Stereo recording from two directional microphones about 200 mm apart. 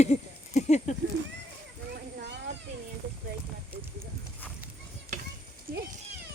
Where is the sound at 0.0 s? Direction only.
35° left (ahead or behind).